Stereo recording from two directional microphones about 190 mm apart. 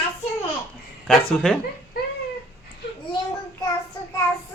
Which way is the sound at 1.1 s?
Centre (ahead or behind).